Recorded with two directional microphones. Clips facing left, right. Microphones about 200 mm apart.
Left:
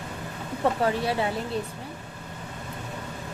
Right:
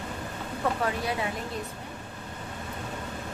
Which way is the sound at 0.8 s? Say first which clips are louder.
Left 4 dB; 30° left (ahead or behind).